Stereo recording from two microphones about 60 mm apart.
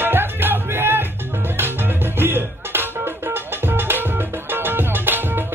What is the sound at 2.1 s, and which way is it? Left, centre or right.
Music, right.